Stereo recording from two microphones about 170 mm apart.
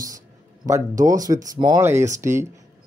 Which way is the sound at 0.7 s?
20° right (ahead or behind).